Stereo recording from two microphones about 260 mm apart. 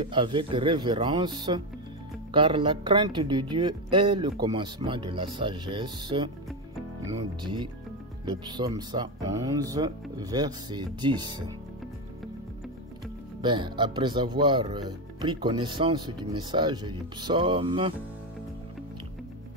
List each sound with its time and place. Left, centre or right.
0.0 s speech: centre
13.4 s speech: centre